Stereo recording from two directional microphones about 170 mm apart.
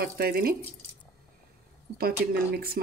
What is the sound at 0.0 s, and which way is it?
Speech, 60° right (ahead or behind).